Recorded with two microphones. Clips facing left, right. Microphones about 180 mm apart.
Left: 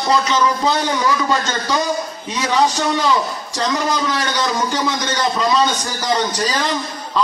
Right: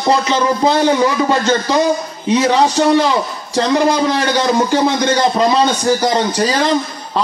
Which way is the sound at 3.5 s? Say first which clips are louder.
Right 7 dB; 30° right (ahead or behind).